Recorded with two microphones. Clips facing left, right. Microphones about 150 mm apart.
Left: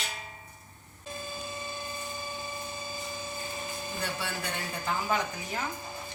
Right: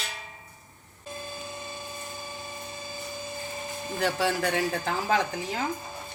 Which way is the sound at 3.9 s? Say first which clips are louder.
Right 11 dB; 90° right.